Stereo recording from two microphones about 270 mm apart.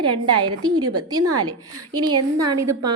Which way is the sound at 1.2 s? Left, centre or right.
Right.